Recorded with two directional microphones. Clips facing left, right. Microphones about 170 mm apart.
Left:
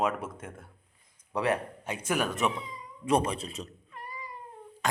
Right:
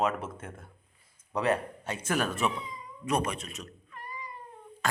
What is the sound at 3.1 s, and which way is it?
Speech, 30° left (ahead or behind).